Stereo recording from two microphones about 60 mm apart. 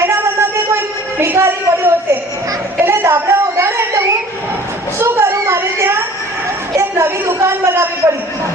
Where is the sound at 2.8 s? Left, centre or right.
Right.